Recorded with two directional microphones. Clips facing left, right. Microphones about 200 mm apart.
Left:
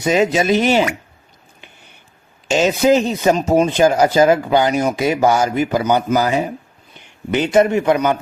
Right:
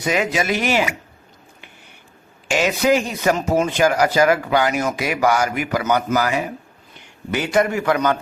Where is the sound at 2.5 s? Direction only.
25° left (ahead or behind).